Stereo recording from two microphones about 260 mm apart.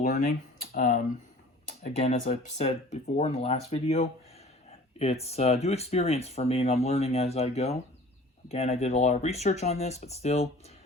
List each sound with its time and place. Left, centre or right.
0.6 s speech: left